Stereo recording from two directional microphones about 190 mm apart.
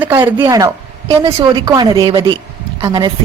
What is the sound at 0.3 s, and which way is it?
Speech, 20° right (ahead or behind).